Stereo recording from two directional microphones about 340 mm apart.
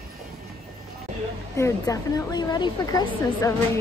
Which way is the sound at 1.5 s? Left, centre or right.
Centre.